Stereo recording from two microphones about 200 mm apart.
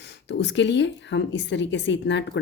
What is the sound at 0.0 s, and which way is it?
A woman's voice, 60° left (ahead or behind).